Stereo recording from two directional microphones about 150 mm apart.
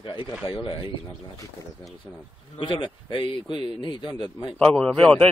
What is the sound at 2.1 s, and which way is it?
Speech, 20° left (ahead or behind).